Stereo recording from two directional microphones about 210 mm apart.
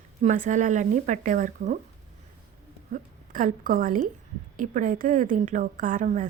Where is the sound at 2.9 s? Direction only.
40° right (ahead or behind).